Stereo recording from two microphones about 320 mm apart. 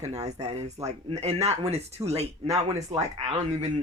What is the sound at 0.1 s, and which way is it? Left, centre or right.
Speech, centre.